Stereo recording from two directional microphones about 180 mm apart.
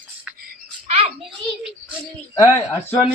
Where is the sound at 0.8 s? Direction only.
35° right (ahead or behind).